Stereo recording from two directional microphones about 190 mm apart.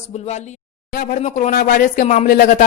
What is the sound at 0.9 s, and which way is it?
Speech, 45° left (ahead or behind).